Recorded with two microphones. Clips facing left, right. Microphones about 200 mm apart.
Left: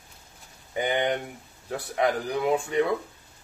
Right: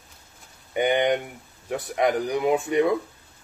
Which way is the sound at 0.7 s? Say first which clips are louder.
Right 4 dB; 20° right (ahead or behind).